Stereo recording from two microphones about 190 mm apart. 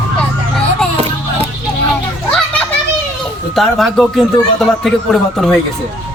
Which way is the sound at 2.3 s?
5° left (ahead or behind).